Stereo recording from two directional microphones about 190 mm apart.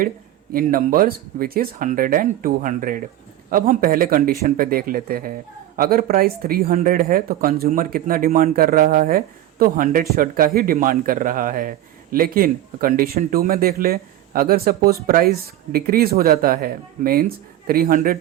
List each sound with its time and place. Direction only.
0.5 s speech: 50° right (ahead or behind)